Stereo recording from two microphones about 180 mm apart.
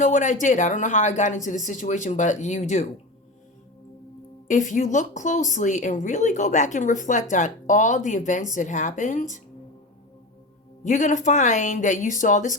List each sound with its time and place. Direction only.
0.0 s speech: 45° left (ahead or behind)
4.4 s speech: 45° left (ahead or behind)
10.8 s speech: 45° left (ahead or behind)